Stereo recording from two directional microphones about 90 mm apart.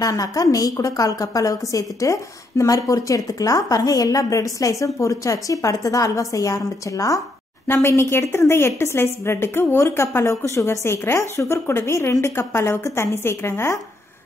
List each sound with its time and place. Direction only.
0.0 s a woman's voice: 40° left (ahead or behind)